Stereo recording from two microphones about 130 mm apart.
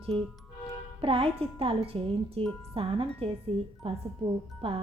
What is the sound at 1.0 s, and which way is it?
Speech, 45° right (ahead or behind).